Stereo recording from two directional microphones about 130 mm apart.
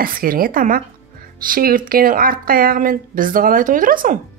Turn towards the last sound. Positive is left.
turn(degrees=-90)